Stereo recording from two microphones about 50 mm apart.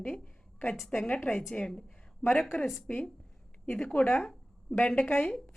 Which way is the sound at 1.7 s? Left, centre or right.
Centre.